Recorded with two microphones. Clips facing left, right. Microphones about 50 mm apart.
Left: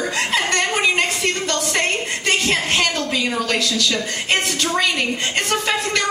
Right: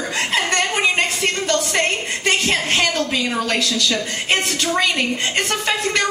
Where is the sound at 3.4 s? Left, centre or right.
Right.